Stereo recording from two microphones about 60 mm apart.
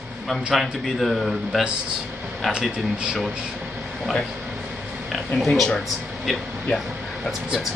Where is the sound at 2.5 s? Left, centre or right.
Centre.